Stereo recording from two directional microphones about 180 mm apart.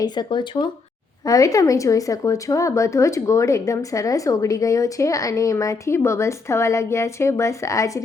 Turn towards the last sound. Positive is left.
turn(degrees=15)  # may be behind; listen again after turning